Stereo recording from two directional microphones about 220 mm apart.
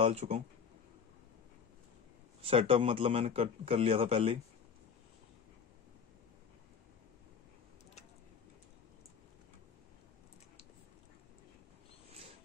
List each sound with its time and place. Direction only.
0.0 s a man's voice: 30° right (ahead or behind)
2.4 s a man's voice: 25° right (ahead or behind)